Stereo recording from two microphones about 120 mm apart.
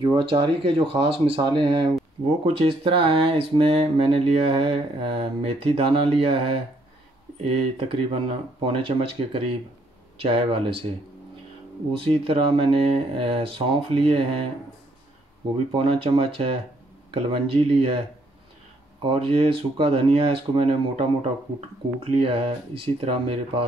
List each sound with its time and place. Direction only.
0.0 s speech: 40° right (ahead or behind)
7.7 s speech: 50° right (ahead or behind)
11.9 s speech: 50° right (ahead or behind)
15.7 s speech: 50° right (ahead or behind)
19.0 s speech: 50° right (ahead or behind)